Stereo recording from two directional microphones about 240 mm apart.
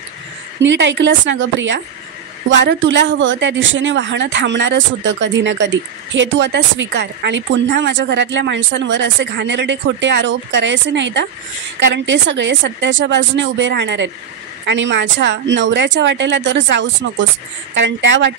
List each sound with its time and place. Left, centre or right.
0.6 s speech: right